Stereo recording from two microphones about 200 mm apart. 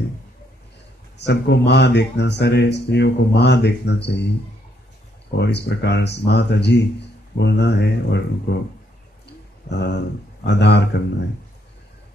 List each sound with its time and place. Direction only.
1.1 s speech: 60° left (ahead or behind)
5.4 s speech: 55° left (ahead or behind)
9.7 s speech: 60° left (ahead or behind)